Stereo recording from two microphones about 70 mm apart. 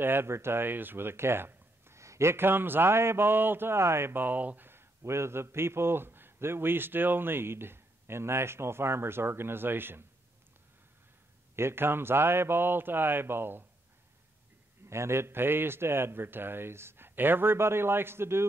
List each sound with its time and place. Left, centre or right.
0.0 s speech: right
11.5 s speech: right
14.9 s speech: right